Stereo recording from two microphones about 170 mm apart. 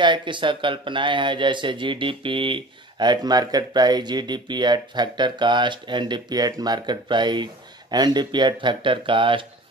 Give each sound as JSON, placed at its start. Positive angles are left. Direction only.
{"t": 0.0, "sound": "speech", "side_deg": -30}